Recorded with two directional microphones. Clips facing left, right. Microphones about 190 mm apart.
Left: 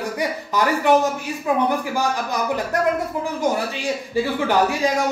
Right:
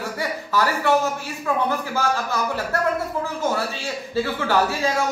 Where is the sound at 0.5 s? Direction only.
15° left (ahead or behind).